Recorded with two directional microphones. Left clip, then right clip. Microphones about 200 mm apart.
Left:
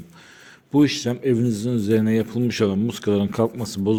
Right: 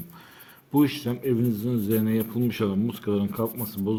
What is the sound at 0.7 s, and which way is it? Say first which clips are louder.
A man's voice: left 4 dB; 20° left (ahead or behind).